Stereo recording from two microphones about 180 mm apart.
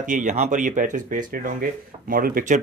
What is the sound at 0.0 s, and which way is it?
Speech, 45° right (ahead or behind).